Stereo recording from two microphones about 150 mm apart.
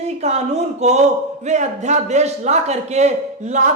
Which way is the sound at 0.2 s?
50° right (ahead or behind).